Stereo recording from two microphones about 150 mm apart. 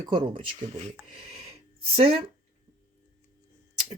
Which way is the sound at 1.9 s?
40° right (ahead or behind).